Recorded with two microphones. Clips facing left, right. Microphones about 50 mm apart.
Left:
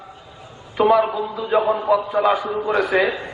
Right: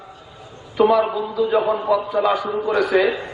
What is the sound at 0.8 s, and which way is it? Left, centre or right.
A man's voice, centre.